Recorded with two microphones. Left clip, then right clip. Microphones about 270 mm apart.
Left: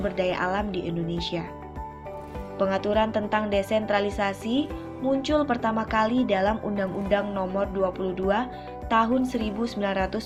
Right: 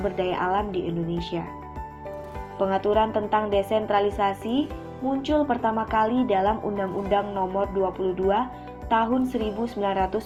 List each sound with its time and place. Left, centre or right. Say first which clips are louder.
0.0 s a woman's voice: even; left
2.6 s a woman's voice: right 2 dB; left